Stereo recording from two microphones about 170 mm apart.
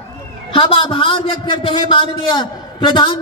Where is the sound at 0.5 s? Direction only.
30° left (ahead or behind).